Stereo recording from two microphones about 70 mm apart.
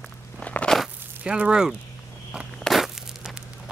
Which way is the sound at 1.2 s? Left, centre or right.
Centre.